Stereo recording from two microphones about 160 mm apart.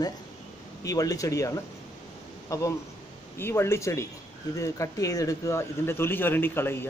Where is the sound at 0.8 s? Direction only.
20° left (ahead or behind).